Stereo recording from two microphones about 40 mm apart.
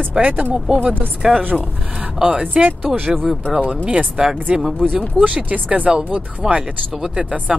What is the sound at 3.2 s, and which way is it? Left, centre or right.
Speech, centre.